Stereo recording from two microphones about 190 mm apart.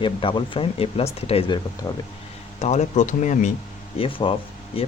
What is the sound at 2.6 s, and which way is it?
Speech, 35° left (ahead or behind).